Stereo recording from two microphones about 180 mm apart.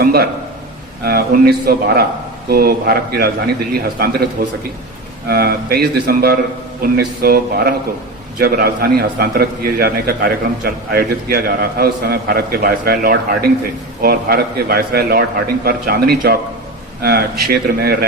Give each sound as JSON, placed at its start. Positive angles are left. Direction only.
{"t": 0.0, "sound": "a man's voice", "side_deg": -60}